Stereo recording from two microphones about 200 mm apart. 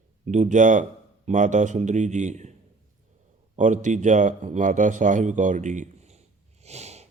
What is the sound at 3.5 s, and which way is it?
Speech, 40° right (ahead or behind).